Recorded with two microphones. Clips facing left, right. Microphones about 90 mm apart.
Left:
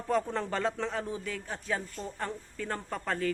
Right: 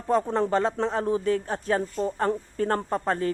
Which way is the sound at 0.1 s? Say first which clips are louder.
Right 7 dB; 30° right (ahead or behind).